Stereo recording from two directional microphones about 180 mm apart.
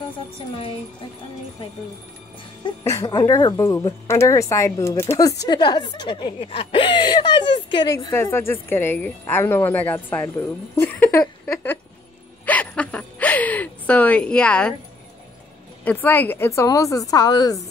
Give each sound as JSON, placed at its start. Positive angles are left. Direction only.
{"t": 2.8, "sound": "a woman's voice", "side_deg": 15}
{"t": 12.4, "sound": "a sound", "side_deg": 5}
{"t": 15.8, "sound": "a woman's voice", "side_deg": 10}